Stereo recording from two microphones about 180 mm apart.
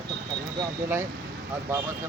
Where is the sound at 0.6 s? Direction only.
15° right (ahead or behind).